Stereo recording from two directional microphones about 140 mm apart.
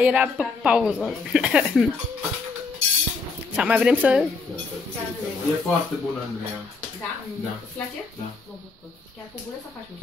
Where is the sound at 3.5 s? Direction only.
10° right (ahead or behind).